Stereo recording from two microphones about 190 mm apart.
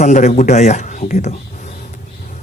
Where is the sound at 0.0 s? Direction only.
40° left (ahead or behind).